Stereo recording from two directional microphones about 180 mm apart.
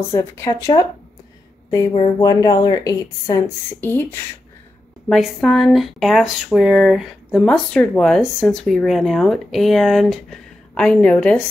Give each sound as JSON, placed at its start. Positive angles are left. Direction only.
{"t": 0.1, "sound": "a woman's voice", "side_deg": 15}
{"t": 5.1, "sound": "speech", "side_deg": 0}